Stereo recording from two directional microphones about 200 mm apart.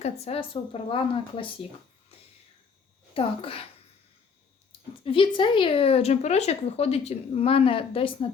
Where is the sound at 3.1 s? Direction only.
25° left (ahead or behind).